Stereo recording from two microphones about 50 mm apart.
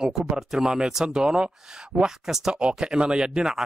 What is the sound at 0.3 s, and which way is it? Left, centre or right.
Speech, centre.